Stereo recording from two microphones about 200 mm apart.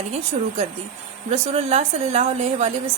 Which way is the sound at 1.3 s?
30° right (ahead or behind).